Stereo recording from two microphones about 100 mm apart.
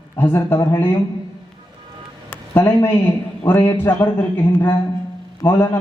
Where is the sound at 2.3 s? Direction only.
20° left (ahead or behind).